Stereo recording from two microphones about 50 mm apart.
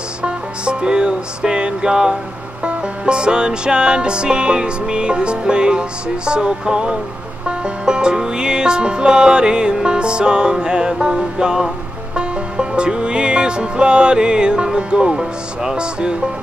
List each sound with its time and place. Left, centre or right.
0.2 s music: right